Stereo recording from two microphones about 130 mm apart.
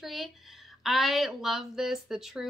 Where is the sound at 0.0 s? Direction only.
Centre (ahead or behind).